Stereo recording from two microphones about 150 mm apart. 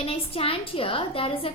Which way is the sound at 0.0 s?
40° left (ahead or behind).